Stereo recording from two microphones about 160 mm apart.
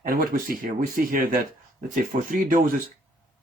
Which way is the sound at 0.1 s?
65° right (ahead or behind).